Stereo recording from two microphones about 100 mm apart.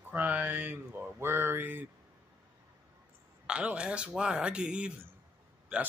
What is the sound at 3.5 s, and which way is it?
Speech, 10° right (ahead or behind).